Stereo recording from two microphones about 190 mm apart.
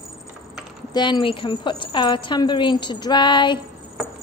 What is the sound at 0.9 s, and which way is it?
A woman's voice, 20° left (ahead or behind).